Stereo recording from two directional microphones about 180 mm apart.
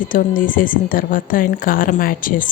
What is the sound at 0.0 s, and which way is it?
Speech, 50° left (ahead or behind).